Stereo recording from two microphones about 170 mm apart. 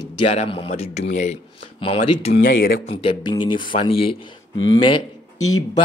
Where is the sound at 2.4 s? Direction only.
60° left (ahead or behind).